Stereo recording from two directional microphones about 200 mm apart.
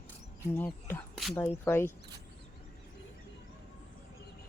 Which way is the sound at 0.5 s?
10° left (ahead or behind).